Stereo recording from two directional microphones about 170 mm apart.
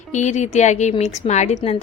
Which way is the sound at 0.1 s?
45° left (ahead or behind).